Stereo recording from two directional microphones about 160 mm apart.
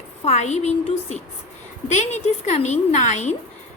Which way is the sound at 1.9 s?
45° left (ahead or behind).